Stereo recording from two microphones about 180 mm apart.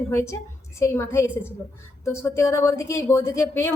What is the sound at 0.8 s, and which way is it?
A woman's voice, 15° left (ahead or behind).